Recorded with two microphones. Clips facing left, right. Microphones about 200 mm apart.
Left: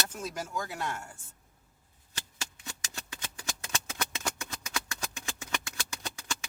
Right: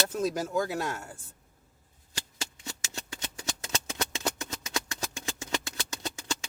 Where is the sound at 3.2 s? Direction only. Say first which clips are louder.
Right 3 dB; 25° right (ahead or behind).